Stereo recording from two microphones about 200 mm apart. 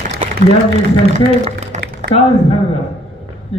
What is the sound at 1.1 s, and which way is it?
Speech, 35° right (ahead or behind).